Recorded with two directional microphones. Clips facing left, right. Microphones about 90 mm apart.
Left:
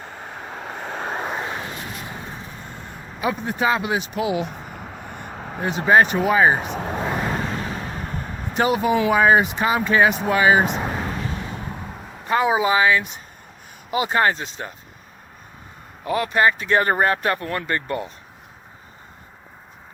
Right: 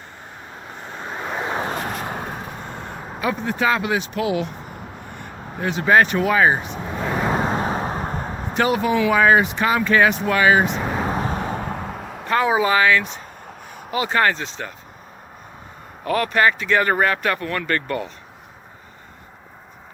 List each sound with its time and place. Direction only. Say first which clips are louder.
0.3 s vehicle: left 5 dB; 75° left (ahead or behind); by 1.2 s 60° left (ahead or behind)
1.5 s a sound: right 7 dB; 55° right (ahead or behind)
3.2 s speech: even; 20° left (ahead or behind)
5.6 s speech: even; 20° left (ahead or behind)
6.6 s speech: left 3 dB; 55° left (ahead or behind)
7.3 s vehicle: right 5 dB; 35° right (ahead or behind)
8.5 s speech: even; 25° left (ahead or behind)
11.0 s vehicle: right 5 dB; 40° right (ahead or behind)
11.6 s a sound: right 5 dB; 90° right
12.3 s speech: even; 15° left (ahead or behind)
16.0 s speech: right 1 dB; 15° left (ahead or behind)
16.6 s speech: even; 35° left (ahead or behind)